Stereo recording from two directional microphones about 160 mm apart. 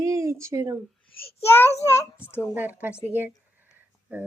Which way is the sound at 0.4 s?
20° right (ahead or behind).